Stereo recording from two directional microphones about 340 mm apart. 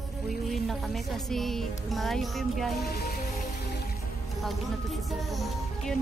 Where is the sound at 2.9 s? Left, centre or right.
Left.